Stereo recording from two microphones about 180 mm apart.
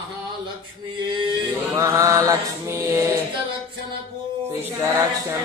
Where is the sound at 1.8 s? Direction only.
15° right (ahead or behind).